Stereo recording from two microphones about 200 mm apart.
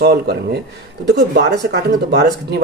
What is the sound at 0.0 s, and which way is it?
Speech, 55° right (ahead or behind).